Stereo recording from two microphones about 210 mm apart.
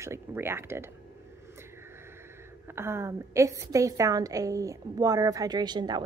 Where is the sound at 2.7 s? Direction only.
10° right (ahead or behind).